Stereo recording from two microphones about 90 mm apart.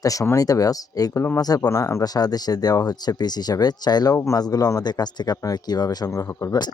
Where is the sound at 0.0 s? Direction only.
40° left (ahead or behind).